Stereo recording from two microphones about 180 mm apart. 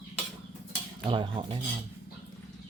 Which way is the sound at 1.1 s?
30° right (ahead or behind).